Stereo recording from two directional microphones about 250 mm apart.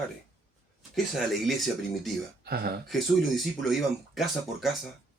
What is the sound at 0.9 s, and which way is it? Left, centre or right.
Speech, centre.